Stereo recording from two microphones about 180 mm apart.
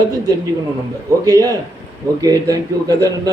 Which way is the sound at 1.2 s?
20° right (ahead or behind).